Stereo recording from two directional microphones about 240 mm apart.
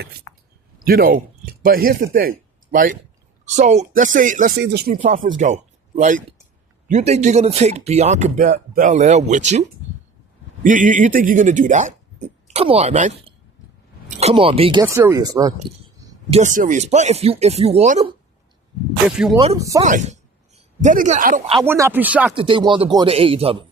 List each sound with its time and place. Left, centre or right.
0.9 s speech: right; by 15.5 s centre
16.3 s speech: right
19.0 s speech: centre
19.5 s speech: centre
19.8 s speech: right
21.6 s speech: centre
22.4 s speech: right